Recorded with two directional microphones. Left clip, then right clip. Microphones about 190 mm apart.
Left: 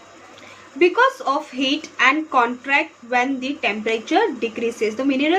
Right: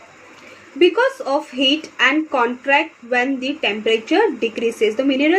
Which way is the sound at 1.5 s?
20° right (ahead or behind).